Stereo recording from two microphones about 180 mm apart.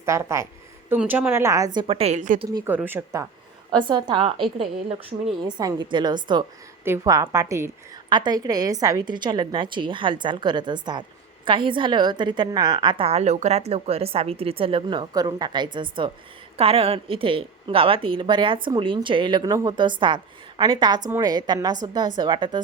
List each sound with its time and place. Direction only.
0.0 s a woman's voice: 15° right (ahead or behind); by 2.4 s 45° right (ahead or behind)
2.4 s a woman's voice: 20° right (ahead or behind)
2.6 s a woman's voice: 10° right (ahead or behind)
3.7 s a woman's voice: 25° right (ahead or behind)
5.5 s a woman's voice: 25° right (ahead or behind)